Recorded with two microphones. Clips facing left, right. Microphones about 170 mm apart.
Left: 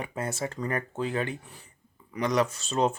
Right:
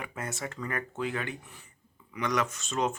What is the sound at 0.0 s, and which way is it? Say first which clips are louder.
Speech: left 5 dB; 30° left (ahead or behind).